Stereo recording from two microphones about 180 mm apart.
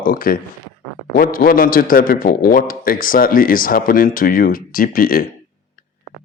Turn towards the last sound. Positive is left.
turn(degrees=55)  # may be behind; listen again after turning